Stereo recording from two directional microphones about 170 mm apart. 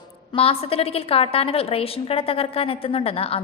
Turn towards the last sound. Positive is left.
turn(degrees=35)  # may be behind; listen again after turning